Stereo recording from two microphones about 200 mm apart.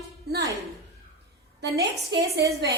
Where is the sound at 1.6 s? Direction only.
55° right (ahead or behind).